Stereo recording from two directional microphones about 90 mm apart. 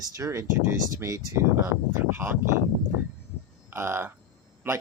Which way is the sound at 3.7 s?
25° right (ahead or behind).